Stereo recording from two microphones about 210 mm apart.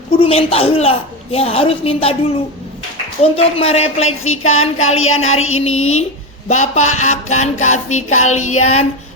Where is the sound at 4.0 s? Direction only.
75° left (ahead or behind).